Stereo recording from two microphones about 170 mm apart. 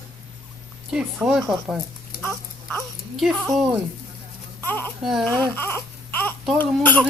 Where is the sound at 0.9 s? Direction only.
5° right (ahead or behind).